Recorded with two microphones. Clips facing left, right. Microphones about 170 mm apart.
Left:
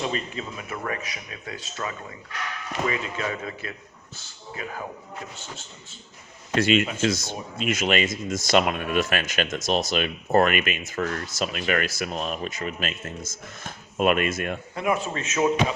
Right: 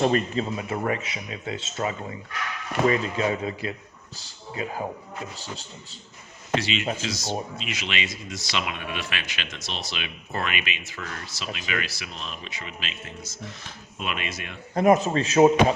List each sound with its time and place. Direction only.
0.3 s speech: 30° right (ahead or behind)
2.8 s a man's voice: 35° right (ahead or behind)
6.6 s speech: 50° left (ahead or behind)
14.8 s a man's voice: 40° right (ahead or behind)